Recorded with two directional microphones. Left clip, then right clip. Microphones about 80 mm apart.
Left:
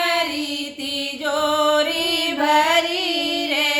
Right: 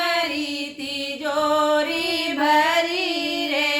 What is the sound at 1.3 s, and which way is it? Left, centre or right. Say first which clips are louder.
Music: left 1 dB; left.